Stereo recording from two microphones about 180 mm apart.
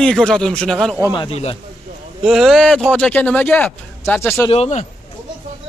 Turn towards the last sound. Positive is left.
turn(degrees=35)  # may be behind; listen again after turning